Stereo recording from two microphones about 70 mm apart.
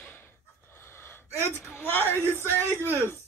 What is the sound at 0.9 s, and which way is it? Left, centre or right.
Gasp, left.